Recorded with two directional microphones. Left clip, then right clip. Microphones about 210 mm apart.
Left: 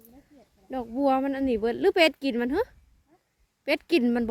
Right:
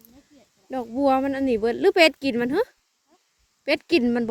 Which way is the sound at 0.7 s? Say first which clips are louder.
Right 3 dB; 10° right (ahead or behind).